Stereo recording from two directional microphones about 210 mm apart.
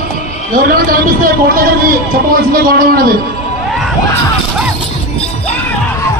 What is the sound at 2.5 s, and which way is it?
Speech, 45° right (ahead or behind).